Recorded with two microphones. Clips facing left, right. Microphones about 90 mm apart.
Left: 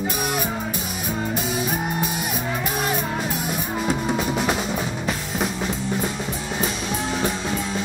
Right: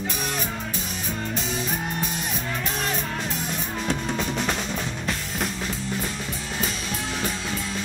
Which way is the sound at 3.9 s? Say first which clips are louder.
Left 4 dB; 10° left (ahead or behind).